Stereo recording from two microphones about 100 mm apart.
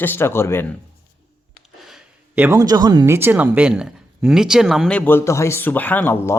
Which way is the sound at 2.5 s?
35° right (ahead or behind).